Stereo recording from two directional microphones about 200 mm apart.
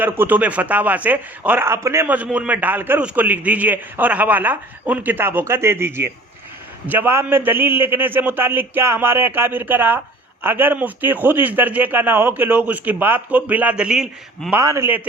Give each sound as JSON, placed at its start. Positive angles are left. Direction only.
{"t": 0.0, "sound": "a man's voice", "side_deg": -10}
{"t": 14.6, "sound": "a man's voice", "side_deg": -15}